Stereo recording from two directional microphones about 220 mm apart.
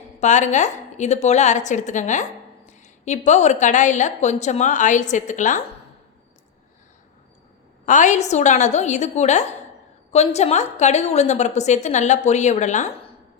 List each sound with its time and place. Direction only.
0.2 s a woman's voice: 35° left (ahead or behind)
7.9 s a woman's voice: 35° left (ahead or behind)